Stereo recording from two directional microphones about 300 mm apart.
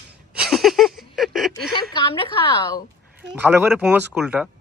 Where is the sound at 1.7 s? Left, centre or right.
Centre.